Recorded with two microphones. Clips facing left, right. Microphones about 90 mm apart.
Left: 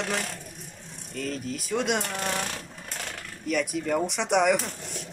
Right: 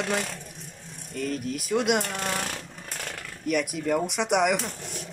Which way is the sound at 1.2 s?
5° right (ahead or behind).